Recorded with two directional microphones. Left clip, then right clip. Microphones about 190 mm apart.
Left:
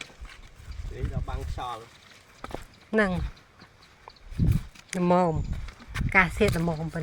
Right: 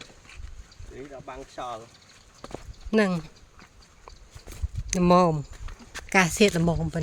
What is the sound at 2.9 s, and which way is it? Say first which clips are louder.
Speech: right 1 dB; 40° right (ahead or behind).